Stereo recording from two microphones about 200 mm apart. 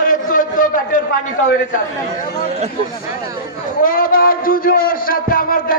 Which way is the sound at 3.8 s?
45° left (ahead or behind).